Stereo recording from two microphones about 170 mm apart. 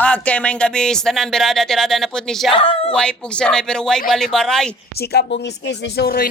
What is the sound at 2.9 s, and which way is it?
Speech, 5° left (ahead or behind).